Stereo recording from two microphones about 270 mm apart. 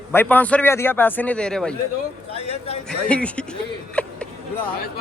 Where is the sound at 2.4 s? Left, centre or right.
Left.